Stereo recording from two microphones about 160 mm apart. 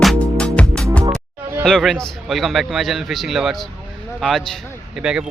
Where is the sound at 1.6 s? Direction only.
Centre (ahead or behind).